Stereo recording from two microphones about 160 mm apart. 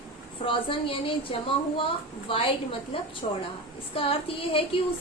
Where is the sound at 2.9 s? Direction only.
35° left (ahead or behind).